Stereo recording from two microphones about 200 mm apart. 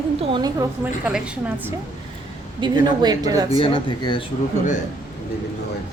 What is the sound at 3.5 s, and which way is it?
Speech, 25° left (ahead or behind).